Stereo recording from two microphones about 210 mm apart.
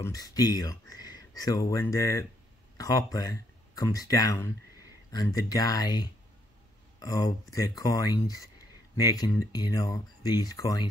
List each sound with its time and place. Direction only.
0.0 s speech: 15° left (ahead or behind)